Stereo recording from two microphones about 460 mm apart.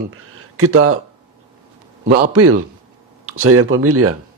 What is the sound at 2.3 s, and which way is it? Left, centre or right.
A man's voice, right.